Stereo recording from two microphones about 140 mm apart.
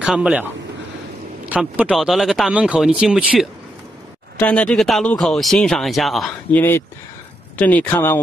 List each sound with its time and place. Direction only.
0.0 s speech: 5° right (ahead or behind)
1.5 s speech: 10° right (ahead or behind)
4.4 s speech: 10° left (ahead or behind)
6.5 s speech: 15° left (ahead or behind)